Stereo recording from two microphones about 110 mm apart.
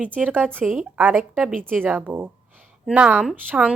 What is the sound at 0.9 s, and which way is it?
A woman's voice, 15° right (ahead or behind).